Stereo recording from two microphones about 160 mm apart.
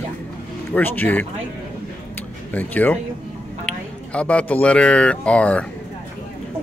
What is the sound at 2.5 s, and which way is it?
Speech, 10° left (ahead or behind).